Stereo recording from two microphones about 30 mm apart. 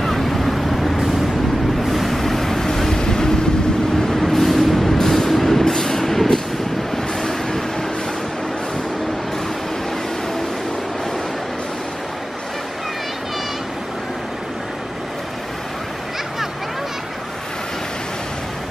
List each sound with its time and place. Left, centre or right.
0.2 s vehicle: centre; by 3.3 s left
4.1 s vehicle: centre
4.9 s vehicle: centre